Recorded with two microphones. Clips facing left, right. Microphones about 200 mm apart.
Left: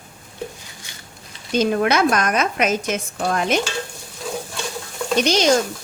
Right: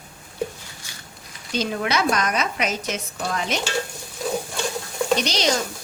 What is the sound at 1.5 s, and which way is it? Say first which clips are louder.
A woman's voice: left 6 dB; 50° left (ahead or behind).